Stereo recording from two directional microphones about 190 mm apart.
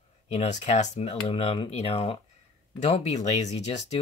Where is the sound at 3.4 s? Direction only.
35° left (ahead or behind).